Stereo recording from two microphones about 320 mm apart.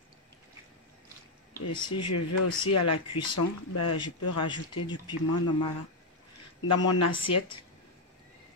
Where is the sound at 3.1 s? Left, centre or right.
Centre.